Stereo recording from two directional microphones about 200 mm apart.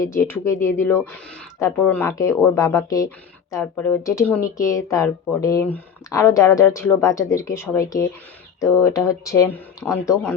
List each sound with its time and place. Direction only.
0.0 s speech: 15° left (ahead or behind)